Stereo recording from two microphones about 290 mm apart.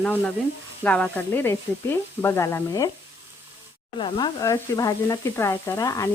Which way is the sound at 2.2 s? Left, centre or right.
Centre.